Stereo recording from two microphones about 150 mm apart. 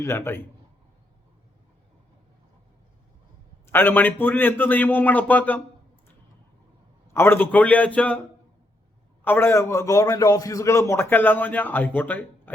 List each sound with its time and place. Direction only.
0.0 s a man's voice: 15° left (ahead or behind)
3.7 s a man's voice: 15° left (ahead or behind)
7.1 s a man's voice: 15° left (ahead or behind)
9.2 s a man's voice: 15° left (ahead or behind)